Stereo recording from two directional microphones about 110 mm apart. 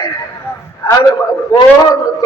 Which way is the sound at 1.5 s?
30° left (ahead or behind).